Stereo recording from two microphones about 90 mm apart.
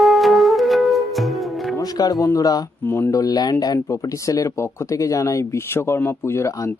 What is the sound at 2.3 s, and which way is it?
Speech, 45° left (ahead or behind).